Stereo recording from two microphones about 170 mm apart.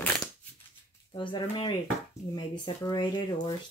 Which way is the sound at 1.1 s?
30° left (ahead or behind).